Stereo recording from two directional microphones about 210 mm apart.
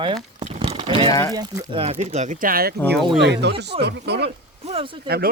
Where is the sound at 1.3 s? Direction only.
20° right (ahead or behind); by 2.7 s 45° right (ahead or behind).